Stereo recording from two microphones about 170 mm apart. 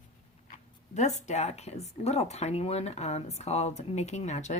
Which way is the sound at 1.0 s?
40° left (ahead or behind).